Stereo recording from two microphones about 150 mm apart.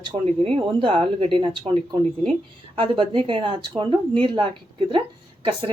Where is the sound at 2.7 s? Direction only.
35° right (ahead or behind).